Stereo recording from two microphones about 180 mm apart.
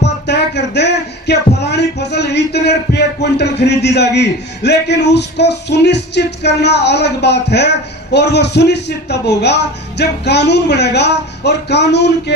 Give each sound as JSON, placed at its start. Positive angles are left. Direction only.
{"t": 0.0, "sound": "a man's voice", "side_deg": 70}